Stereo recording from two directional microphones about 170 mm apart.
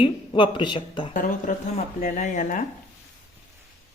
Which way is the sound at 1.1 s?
50° left (ahead or behind).